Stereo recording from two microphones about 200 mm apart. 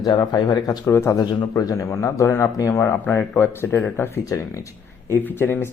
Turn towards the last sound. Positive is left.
turn(degrees=10)  # may be behind; listen again after turning